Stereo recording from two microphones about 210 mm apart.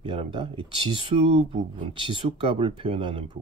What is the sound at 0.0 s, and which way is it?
Speech, 25° right (ahead or behind).